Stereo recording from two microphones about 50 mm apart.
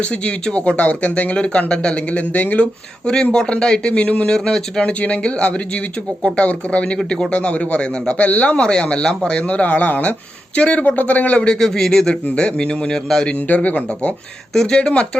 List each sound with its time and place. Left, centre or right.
0.0 s speech: centre
3.3 s speech: centre
4.3 s speech: centre
8.5 s speech: centre
11.6 s a man's voice: centre
12.3 s speech: left
13.2 s speech: left
14.5 s a man's voice: centre
14.8 s speech: left